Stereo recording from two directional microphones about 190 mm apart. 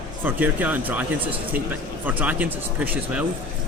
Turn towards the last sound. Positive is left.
turn(degrees=-10)  # may be behind; listen again after turning